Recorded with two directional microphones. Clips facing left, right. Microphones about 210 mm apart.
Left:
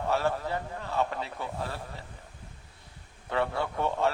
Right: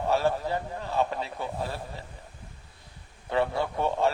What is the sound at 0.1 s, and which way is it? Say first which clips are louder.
A man's voice: right 3 dB; 15° right (ahead or behind).